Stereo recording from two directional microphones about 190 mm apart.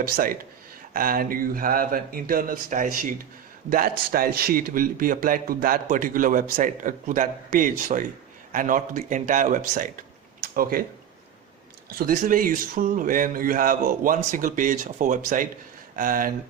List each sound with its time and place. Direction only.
0.0 s speech: 50° right (ahead or behind)
11.9 s speech: 45° right (ahead or behind)